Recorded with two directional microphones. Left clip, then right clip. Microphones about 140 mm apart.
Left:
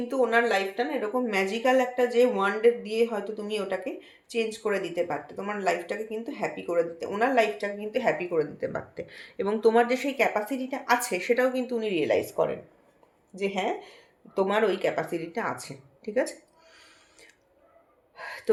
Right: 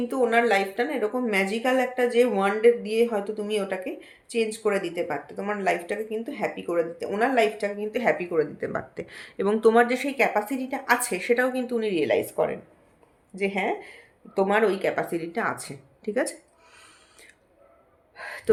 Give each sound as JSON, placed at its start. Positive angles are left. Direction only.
{"t": 0.1, "sound": "speech", "side_deg": -30}
{"t": 18.2, "sound": "gasp", "side_deg": -30}